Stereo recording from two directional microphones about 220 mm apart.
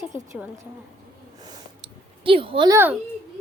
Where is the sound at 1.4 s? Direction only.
25° right (ahead or behind).